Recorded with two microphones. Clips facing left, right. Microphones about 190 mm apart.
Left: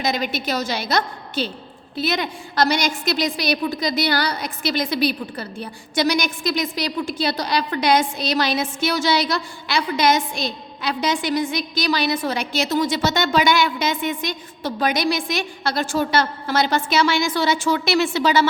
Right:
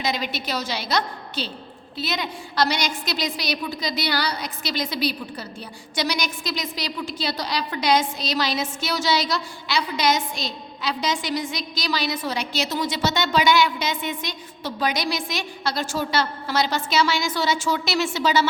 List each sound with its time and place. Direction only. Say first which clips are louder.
0.0 s a woman's voice: left 4 dB; 50° left (ahead or behind)